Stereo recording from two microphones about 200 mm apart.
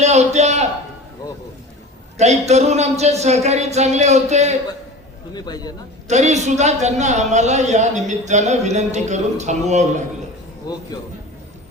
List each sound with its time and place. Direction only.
0.0 s a man's voice: 35° right (ahead or behind)
2.1 s a man's voice: 35° right (ahead or behind)
5.3 s a man's voice: 20° left (ahead or behind)
6.1 s a man's voice: 35° right (ahead or behind)
10.7 s a man's voice: 20° left (ahead or behind)